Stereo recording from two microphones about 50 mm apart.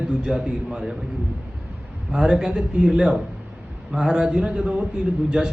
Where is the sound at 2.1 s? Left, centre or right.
Centre.